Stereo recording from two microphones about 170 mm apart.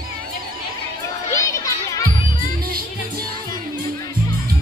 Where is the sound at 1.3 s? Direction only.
20° left (ahead or behind).